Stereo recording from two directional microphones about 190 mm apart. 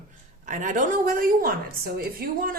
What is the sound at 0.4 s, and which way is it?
A woman's voice, 40° right (ahead or behind).